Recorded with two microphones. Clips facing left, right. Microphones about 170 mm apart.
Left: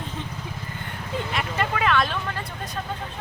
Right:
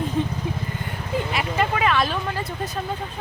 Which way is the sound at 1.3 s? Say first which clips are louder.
Right 2 dB; 5° right (ahead or behind).